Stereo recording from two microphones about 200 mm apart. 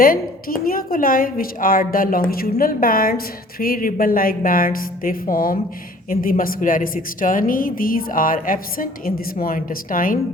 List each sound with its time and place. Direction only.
0.0 s a woman's voice: 45° left (ahead or behind)